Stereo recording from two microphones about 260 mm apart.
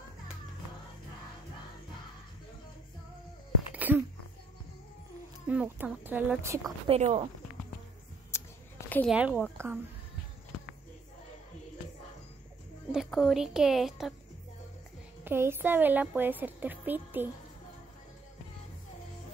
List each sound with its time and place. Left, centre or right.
3.7 s a sound: centre
5.5 s a woman's voice: centre
6.9 s speech: right
8.8 s a sound: centre
9.1 s a woman's voice: centre
12.9 s a woman's voice: centre
15.2 s a woman's voice: centre